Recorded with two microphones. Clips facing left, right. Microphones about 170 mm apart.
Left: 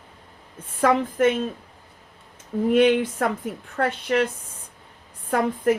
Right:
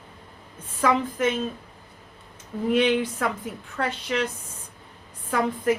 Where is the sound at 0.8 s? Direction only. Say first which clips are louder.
Left 3 dB; 55° left (ahead or behind).